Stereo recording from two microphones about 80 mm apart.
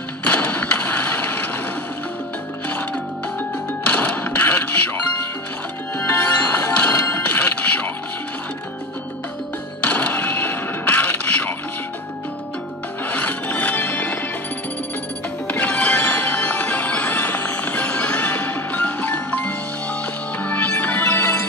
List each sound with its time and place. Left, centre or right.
0.2 s a sound: centre
3.8 s music: centre
9.8 s a sound: centre
13.1 s music: centre
15.4 s music: centre
21.1 s music: left